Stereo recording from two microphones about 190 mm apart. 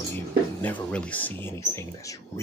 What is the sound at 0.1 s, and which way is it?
Speech, 10° left (ahead or behind).